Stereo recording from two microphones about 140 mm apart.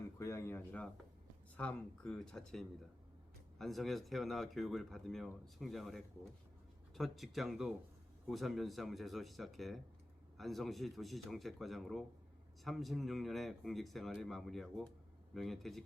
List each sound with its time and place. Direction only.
0.2 s speech: 20° left (ahead or behind); by 15.8 s centre (ahead or behind)